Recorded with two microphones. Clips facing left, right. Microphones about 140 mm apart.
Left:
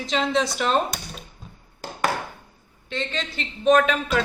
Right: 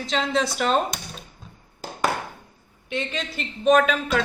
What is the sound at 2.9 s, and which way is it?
A man's voice, 10° right (ahead or behind).